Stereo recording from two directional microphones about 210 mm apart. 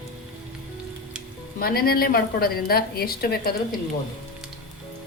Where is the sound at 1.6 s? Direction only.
45° left (ahead or behind).